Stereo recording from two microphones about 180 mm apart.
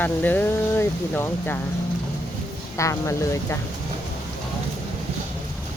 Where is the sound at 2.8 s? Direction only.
15° left (ahead or behind).